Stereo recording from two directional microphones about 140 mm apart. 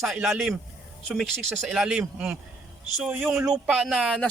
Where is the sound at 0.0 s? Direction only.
Centre (ahead or behind).